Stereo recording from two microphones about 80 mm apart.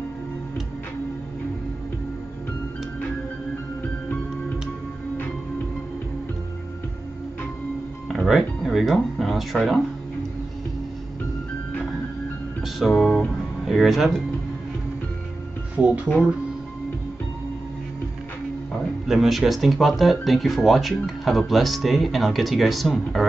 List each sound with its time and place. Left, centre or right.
8.1 s music: centre
12.6 s music: centre
13.7 s speech: centre
15.7 s speech: centre
18.7 s speech: centre